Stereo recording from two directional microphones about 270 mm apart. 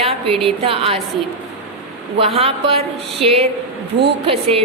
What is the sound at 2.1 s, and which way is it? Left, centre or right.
Speech, right.